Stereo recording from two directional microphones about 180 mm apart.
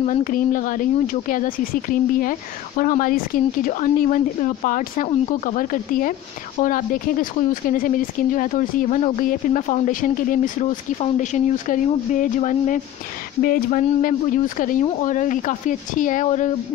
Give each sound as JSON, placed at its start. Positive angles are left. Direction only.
{"t": 0.0, "sound": "speech", "side_deg": 45}